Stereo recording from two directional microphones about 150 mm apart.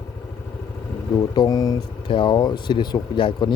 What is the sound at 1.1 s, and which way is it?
Speech, 25° left (ahead or behind).